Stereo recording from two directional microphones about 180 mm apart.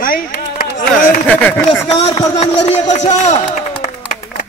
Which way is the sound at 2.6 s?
40° left (ahead or behind).